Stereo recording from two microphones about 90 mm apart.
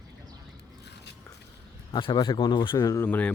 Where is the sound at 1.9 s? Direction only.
70° left (ahead or behind); by 3.0 s 45° left (ahead or behind).